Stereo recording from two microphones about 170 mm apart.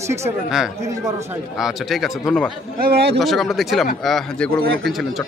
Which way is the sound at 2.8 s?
65° right (ahead or behind).